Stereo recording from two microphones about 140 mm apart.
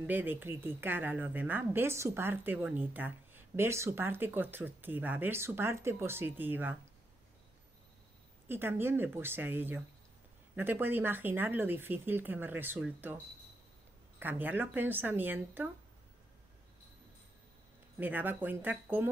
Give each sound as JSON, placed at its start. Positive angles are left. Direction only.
{"t": 0.0, "sound": "speech", "side_deg": -15}
{"t": 8.5, "sound": "speech", "side_deg": -15}
{"t": 14.2, "sound": "speech", "side_deg": -15}
{"t": 17.9, "sound": "speech", "side_deg": -15}